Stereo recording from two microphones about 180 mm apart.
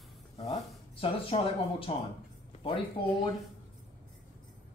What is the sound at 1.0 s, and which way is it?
Speech, 30° left (ahead or behind).